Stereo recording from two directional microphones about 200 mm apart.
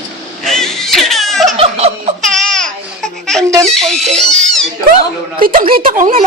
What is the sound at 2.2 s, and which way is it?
Baby cry, centre (ahead or behind).